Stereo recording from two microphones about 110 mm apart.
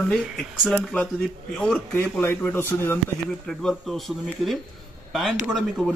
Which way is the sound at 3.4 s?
5° left (ahead or behind).